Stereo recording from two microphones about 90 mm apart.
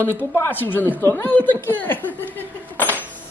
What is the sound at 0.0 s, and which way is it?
Speech, 20° left (ahead or behind).